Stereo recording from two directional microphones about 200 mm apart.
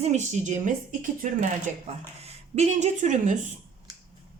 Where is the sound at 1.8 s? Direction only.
30° right (ahead or behind).